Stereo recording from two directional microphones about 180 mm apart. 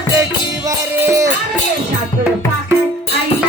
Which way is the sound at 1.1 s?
15° right (ahead or behind).